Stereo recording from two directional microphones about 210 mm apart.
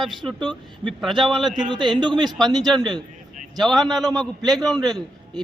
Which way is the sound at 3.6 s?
Centre (ahead or behind).